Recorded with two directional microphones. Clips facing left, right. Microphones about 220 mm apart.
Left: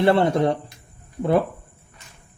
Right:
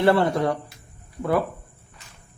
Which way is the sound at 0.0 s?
20° left (ahead or behind).